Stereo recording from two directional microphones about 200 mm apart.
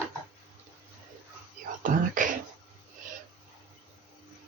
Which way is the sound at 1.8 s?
40° right (ahead or behind).